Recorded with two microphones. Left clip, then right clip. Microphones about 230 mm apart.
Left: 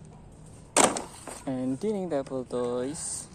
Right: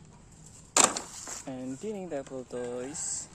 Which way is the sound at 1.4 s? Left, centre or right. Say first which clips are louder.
Left 9 dB; centre.